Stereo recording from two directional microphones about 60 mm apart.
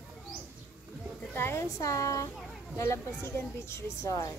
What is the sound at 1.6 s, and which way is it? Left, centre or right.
Speech, left.